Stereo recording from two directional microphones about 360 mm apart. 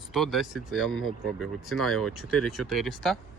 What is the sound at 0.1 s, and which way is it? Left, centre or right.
Speech, centre.